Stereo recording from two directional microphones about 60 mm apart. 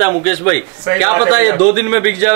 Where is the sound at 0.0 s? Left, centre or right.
Right.